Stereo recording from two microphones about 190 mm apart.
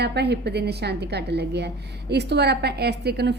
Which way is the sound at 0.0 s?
60° right (ahead or behind).